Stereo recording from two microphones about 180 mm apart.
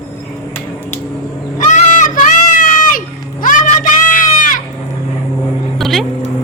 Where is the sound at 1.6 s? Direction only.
45° left (ahead or behind).